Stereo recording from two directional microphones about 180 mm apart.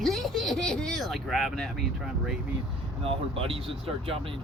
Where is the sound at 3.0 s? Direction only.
30° right (ahead or behind).